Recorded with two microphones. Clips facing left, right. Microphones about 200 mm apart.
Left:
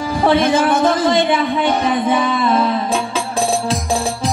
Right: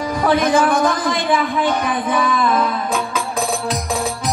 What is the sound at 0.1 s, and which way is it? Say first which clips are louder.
A man's voice: left 2 dB; 25° left (ahead or behind).